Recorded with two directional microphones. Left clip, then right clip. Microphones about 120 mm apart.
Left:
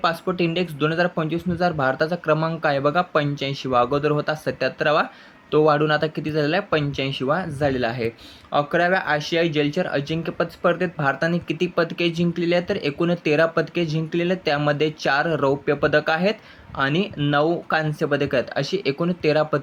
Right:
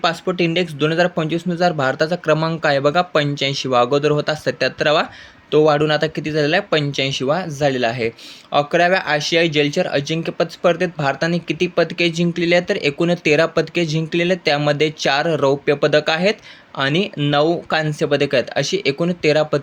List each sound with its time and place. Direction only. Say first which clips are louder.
0.0 s speech: right 3 dB; 30° right (ahead or behind)